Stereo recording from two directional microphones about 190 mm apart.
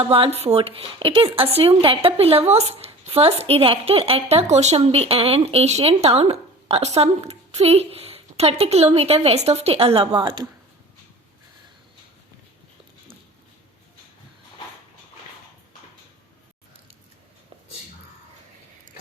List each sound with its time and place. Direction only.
0.0 s speech: 30° right (ahead or behind)